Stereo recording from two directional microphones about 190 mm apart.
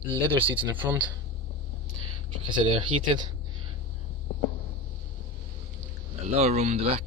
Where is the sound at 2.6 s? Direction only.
25° right (ahead or behind).